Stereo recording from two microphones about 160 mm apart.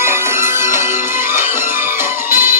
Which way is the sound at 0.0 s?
15° right (ahead or behind).